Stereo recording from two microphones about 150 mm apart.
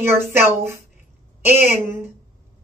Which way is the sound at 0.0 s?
15° right (ahead or behind).